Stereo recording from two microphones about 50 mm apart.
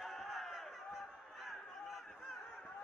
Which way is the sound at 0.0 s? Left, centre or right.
Centre.